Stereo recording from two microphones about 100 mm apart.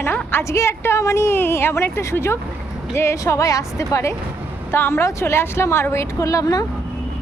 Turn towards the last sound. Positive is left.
turn(degrees=35)  # may be behind; listen again after turning